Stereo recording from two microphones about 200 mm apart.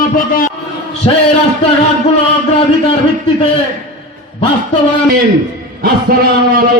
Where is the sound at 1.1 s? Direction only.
25° left (ahead or behind).